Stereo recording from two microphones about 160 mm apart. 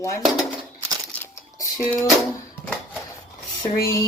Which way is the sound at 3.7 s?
20° left (ahead or behind).